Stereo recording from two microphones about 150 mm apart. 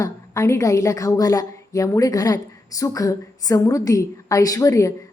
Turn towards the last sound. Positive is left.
turn(degrees=20)  # may be behind; listen again after turning